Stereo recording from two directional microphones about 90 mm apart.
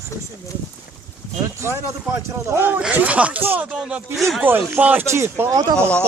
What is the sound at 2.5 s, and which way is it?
Speech, 25° right (ahead or behind).